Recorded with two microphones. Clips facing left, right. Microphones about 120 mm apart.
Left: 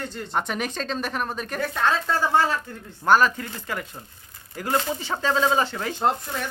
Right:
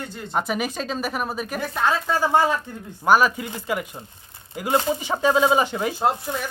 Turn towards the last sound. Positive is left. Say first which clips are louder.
# right 1 dB
turn(degrees=-5)  # may be behind; listen again after turning